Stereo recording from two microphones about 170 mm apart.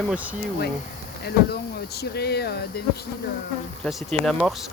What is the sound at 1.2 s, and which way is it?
Speech, 70° left (ahead or behind).